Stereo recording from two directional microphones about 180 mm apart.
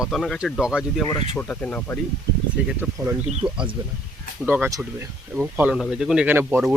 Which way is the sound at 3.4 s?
25° right (ahead or behind).